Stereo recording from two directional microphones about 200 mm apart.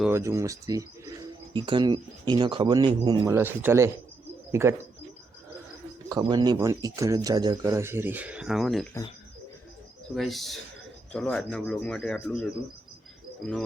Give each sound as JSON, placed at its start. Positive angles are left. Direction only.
{"t": 0.0, "sound": "speech", "side_deg": -15}
{"t": 6.1, "sound": "speech", "side_deg": -20}
{"t": 10.2, "sound": "speech", "side_deg": 0}